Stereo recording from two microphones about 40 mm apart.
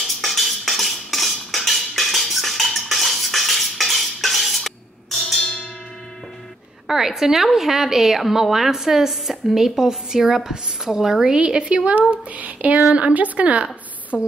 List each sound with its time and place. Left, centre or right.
0.0 s cutlery: centre
6.9 s a woman's voice: centre
11.2 s a woman's voice: right
12.3 s a sound: right
12.9 s speech: right
14.1 s speech: centre